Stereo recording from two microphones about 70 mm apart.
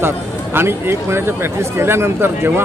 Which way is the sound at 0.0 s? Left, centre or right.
Right.